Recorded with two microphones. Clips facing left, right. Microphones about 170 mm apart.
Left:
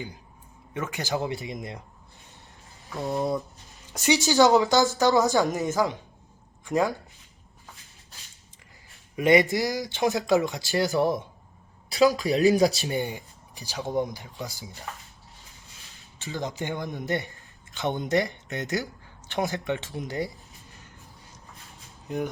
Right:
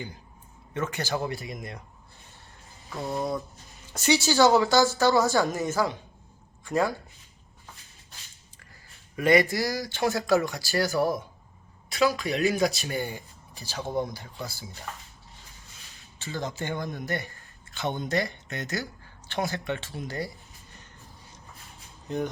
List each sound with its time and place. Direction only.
0.9 s speech: 15° left (ahead or behind)
2.9 s speech: centre (ahead or behind)
3.9 s a woman's voice: 15° left (ahead or behind)
9.1 s speech: 20° left (ahead or behind)
11.9 s a man's voice: 35° left (ahead or behind)
12.9 s a woman's voice: 20° left (ahead or behind)
16.1 s speech: 15° left (ahead or behind)